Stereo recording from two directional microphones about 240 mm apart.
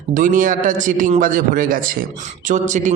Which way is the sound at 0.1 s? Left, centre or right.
Right.